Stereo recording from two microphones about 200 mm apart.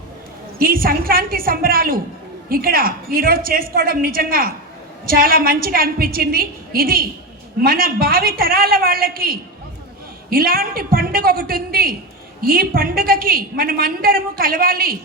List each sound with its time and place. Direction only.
0.6 s a woman's voice: 45° right (ahead or behind)